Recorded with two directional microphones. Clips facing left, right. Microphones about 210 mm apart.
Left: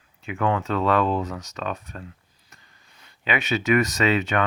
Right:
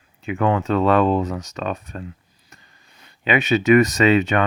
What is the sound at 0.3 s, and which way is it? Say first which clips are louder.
Speech: right 4 dB; 20° right (ahead or behind).